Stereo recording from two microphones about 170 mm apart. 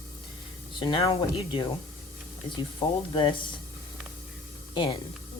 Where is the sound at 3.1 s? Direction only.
30° left (ahead or behind).